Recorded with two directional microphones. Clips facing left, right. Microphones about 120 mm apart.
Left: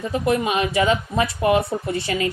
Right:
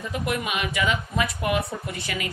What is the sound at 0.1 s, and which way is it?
A woman's voice, 30° left (ahead or behind).